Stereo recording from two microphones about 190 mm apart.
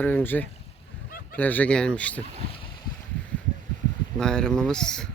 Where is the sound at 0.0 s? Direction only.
10° left (ahead or behind).